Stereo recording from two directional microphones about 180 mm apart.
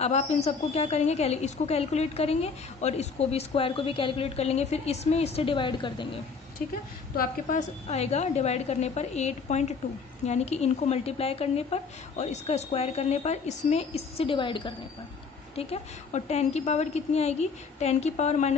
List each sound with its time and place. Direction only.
0.0 s a woman's voice: 40° left (ahead or behind)
7.2 s a woman's voice: 45° left (ahead or behind)